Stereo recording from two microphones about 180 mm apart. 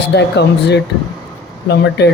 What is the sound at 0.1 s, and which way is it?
Speech, 70° left (ahead or behind).